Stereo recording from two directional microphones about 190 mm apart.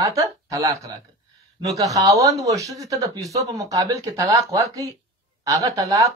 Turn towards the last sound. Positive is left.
turn(degrees=-15)  # may be behind; listen again after turning